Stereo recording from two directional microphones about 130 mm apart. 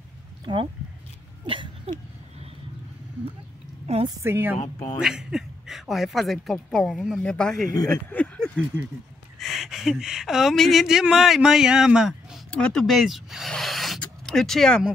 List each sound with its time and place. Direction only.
0.5 s speech: 35° right (ahead or behind)
1.4 s a sound: 40° right (ahead or behind)
3.8 s a woman's voice: 50° right (ahead or behind)
4.2 s a woman's voice: 20° right (ahead or behind)
4.7 s speech: 20° left (ahead or behind)
5.0 s speech: 5° right (ahead or behind)
7.9 s a sound: 10° left (ahead or behind)
9.4 s speech: centre (ahead or behind)
12.4 s speech: 5° left (ahead or behind)